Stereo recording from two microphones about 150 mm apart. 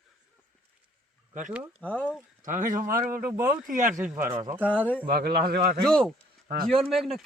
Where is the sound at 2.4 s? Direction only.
60° right (ahead or behind).